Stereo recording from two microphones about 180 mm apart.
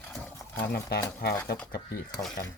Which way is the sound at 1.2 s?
60° left (ahead or behind).